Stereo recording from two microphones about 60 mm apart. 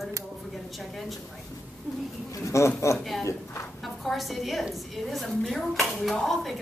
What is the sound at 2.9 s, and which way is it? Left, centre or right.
Speech, centre.